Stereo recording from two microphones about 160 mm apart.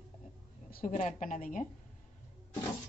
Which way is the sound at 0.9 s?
50° left (ahead or behind).